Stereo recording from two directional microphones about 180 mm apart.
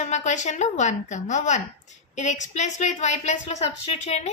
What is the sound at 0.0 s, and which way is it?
A woman's voice, 40° left (ahead or behind).